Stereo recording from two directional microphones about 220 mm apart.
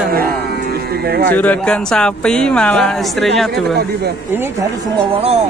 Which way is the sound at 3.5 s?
50° right (ahead or behind).